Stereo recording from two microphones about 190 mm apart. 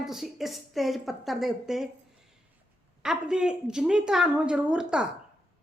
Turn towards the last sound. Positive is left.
turn(degrees=-5)  # may be behind; listen again after turning